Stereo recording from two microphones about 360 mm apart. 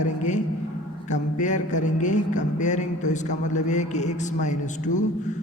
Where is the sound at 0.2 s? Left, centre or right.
Centre.